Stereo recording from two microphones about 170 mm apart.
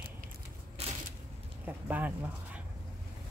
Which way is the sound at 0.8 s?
35° right (ahead or behind).